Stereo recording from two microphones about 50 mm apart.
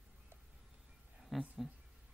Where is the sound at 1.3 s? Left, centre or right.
Centre.